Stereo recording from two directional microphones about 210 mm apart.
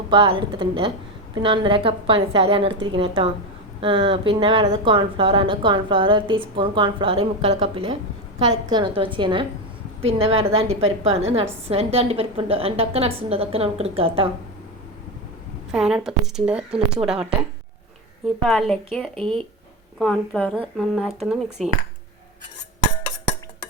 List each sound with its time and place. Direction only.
0.1 s speech: 25° right (ahead or behind)
15.7 s speech: 5° right (ahead or behind)
18.4 s speech: centre (ahead or behind)
20.0 s speech: 5° left (ahead or behind)